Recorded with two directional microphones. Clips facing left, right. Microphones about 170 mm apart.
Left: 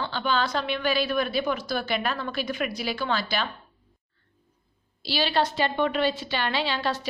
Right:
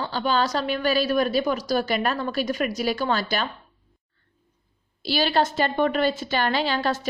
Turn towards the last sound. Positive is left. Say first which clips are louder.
# right 3 dB
turn(degrees=-45)  # may be behind; listen again after turning